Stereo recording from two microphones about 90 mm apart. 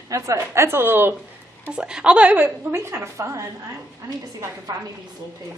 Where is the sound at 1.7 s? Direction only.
10° right (ahead or behind); by 4.8 s 45° right (ahead or behind).